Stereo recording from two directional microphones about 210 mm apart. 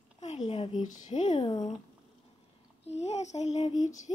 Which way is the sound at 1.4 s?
20° left (ahead or behind).